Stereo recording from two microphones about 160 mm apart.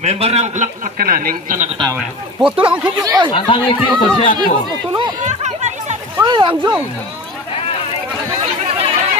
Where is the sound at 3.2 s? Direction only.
30° left (ahead or behind).